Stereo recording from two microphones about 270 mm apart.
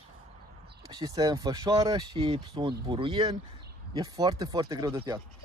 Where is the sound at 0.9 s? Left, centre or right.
Centre.